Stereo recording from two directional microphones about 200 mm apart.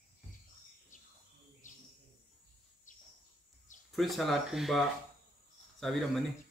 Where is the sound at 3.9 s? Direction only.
Centre (ahead or behind).